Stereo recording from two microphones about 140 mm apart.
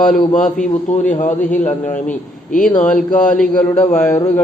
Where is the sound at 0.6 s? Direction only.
60° left (ahead or behind).